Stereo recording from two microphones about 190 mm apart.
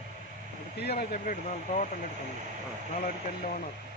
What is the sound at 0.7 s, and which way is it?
Speech, 55° left (ahead or behind).